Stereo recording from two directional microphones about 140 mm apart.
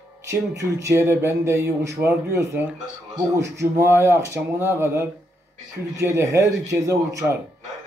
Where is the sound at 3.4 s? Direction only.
20° right (ahead or behind).